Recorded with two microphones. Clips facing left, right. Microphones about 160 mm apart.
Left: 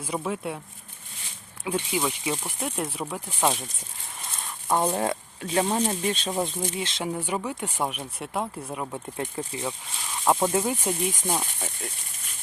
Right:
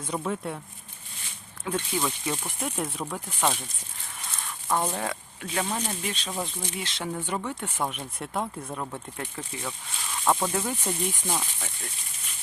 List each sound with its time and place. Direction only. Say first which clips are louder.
0.0 s speech: left 1 dB; 5° left (ahead or behind)
1.6 s speech: left 2 dB; 10° left (ahead or behind)
4.7 s speech: left 4 dB; 30° left (ahead or behind); by 9.0 s 10° left (ahead or behind)
9.1 s speech: left 5 dB; 25° left (ahead or behind)
11.1 s speech: left 3 dB; 45° left (ahead or behind)